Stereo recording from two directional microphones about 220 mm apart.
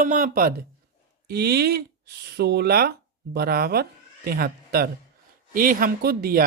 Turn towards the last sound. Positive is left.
turn(degrees=-45)  # may be behind; listen again after turning